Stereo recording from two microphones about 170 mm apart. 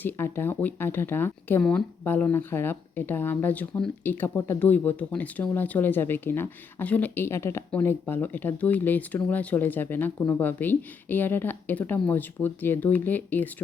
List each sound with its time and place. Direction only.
0.0 s speech: 15° left (ahead or behind)